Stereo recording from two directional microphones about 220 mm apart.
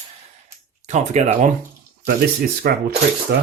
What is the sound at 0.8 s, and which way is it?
Speech, 30° right (ahead or behind).